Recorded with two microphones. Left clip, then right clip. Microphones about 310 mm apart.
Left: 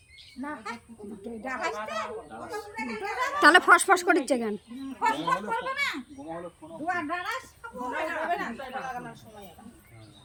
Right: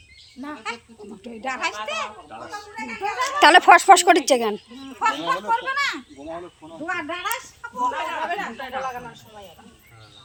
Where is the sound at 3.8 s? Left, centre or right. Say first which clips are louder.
Right 9 dB; right.